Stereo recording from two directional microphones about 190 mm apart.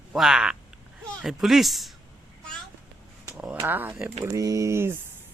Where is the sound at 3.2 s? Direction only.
10° right (ahead or behind).